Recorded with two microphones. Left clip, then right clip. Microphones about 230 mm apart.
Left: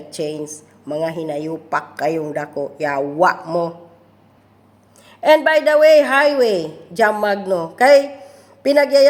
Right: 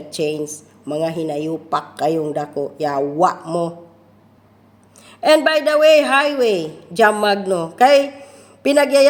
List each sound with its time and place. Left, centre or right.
0.2 s a woman's voice: centre
2.0 s speech: centre
2.2 s a woman's voice: centre
5.0 s a woman's voice: centre